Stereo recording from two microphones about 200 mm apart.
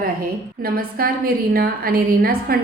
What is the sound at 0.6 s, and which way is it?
A woman's voice, 45° right (ahead or behind).